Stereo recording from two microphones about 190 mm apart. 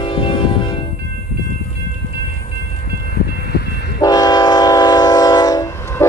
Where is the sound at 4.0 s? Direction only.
20° left (ahead or behind).